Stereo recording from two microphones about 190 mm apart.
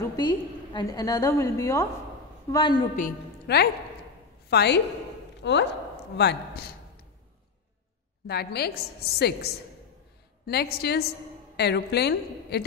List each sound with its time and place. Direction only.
0.0 s a woman's voice: 20° left (ahead or behind)
3.5 s a woman's voice: 60° left (ahead or behind)
8.3 s a woman's voice: 60° left (ahead or behind)